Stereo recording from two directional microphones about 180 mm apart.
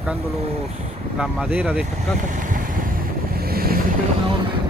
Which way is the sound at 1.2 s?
5° right (ahead or behind).